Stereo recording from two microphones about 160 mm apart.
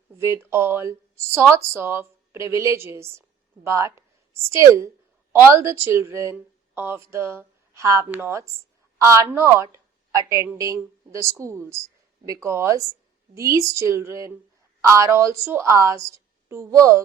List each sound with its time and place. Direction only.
0.2 s a woman's voice: 15° right (ahead or behind)